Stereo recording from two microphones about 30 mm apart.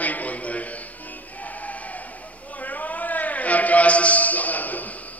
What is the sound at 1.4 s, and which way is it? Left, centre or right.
Crowd, left.